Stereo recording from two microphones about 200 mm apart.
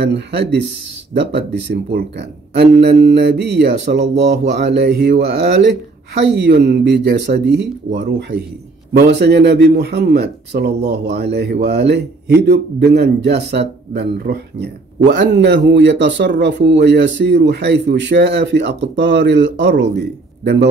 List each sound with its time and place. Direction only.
0.0 s a man's voice: 55° right (ahead or behind)